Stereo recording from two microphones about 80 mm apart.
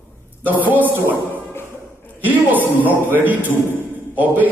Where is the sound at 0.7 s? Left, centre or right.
Right.